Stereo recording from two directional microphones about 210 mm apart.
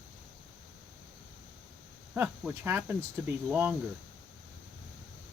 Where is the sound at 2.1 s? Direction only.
10° right (ahead or behind).